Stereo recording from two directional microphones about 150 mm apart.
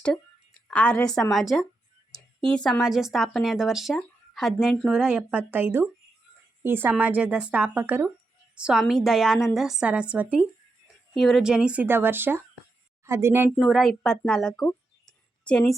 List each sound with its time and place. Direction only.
0.7 s a woman's voice: 10° left (ahead or behind); by 10.4 s 10° right (ahead or behind)
11.1 s speech: centre (ahead or behind); by 13.5 s 15° right (ahead or behind)
13.6 s a woman's voice: centre (ahead or behind)